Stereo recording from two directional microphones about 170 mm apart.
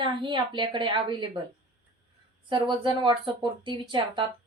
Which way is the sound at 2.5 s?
30° right (ahead or behind).